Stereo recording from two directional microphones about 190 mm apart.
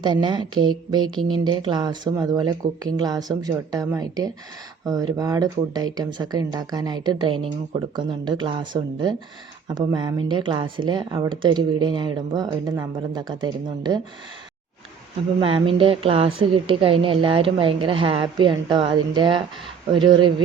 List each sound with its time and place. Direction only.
0.0 s speech: 25° right (ahead or behind)
15.4 s speech: 30° right (ahead or behind)